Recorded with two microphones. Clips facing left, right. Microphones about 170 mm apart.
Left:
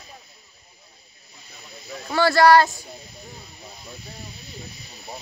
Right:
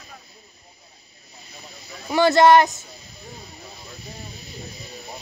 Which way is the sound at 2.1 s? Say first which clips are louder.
Right 1 dB; 20° right (ahead or behind).